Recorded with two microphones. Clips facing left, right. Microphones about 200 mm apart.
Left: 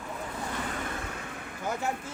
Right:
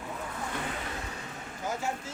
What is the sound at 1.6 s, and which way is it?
Vehicle, 55° left (ahead or behind).